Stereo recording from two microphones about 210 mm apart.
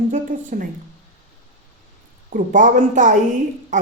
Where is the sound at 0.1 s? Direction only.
40° right (ahead or behind).